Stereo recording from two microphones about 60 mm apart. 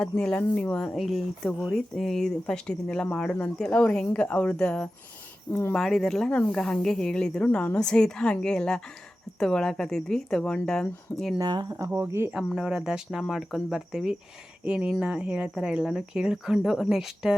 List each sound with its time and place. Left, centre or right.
0.0 s speech: centre
0.9 s speech: centre
5.5 s speech: left
5.7 s speech: centre
11.3 s speech: right
11.9 s speech: right
12.5 s speech: centre
15.5 s speech: centre